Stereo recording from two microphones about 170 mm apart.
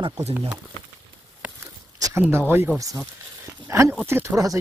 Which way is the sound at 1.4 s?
15° right (ahead or behind).